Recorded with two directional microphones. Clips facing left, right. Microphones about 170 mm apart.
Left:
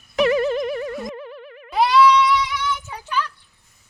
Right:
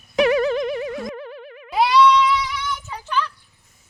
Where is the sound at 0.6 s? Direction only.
Centre (ahead or behind).